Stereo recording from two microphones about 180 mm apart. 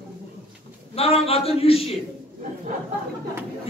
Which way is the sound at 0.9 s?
35° left (ahead or behind).